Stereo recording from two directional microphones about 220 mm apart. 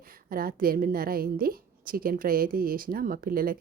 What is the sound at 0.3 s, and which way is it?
A woman's voice, 40° right (ahead or behind).